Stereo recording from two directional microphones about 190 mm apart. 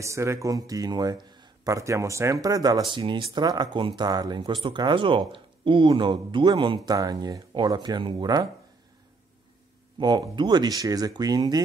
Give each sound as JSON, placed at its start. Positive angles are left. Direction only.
{"t": 0.0, "sound": "speech", "side_deg": -15}
{"t": 9.9, "sound": "speech", "side_deg": -20}